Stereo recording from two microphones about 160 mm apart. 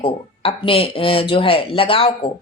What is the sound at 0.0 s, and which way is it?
Speech, 35° left (ahead or behind).